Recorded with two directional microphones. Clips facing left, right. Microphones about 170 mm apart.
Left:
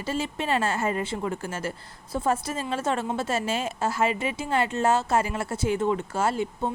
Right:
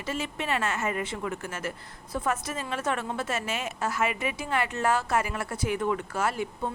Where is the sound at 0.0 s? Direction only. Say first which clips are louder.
Left 3 dB; 30° left (ahead or behind).